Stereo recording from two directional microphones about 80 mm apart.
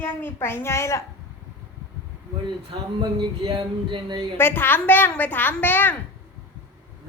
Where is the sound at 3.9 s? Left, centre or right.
Right.